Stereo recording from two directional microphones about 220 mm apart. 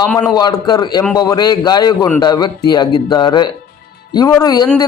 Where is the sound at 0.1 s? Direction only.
5° left (ahead or behind).